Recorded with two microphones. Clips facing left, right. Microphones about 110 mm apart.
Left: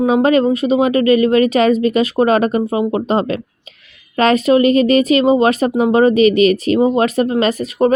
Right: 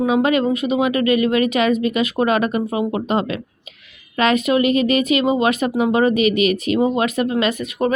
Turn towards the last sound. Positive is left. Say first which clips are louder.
# left 5 dB
turn(degrees=35)  # may be behind; listen again after turning